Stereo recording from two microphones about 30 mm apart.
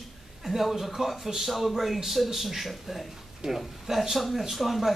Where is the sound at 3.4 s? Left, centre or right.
Right.